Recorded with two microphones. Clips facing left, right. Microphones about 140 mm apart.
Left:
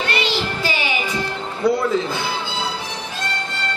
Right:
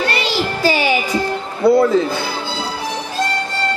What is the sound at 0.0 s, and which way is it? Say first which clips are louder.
Music: right 3 dB; 35° right (ahead or behind).